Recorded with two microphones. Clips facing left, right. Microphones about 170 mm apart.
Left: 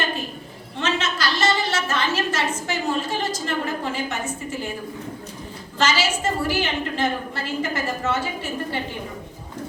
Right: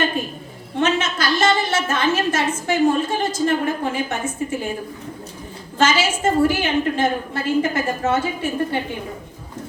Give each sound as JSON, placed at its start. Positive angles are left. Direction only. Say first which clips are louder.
{"t": 0.8, "sound": "a sound", "louder": "right 4 dB", "side_deg": -50}
{"t": 1.9, "sound": "a woman's voice", "louder": "right 4 dB", "side_deg": -50}
{"t": 5.8, "sound": "a woman's voice", "louder": "right 4 dB", "side_deg": -50}